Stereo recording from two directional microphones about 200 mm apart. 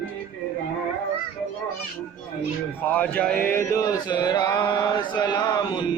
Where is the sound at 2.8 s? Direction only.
10° left (ahead or behind).